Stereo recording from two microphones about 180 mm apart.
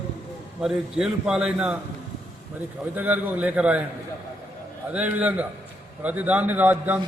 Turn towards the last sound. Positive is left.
turn(degrees=-10)  # may be behind; listen again after turning